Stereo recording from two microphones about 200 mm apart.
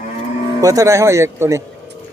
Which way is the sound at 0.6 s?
15° right (ahead or behind).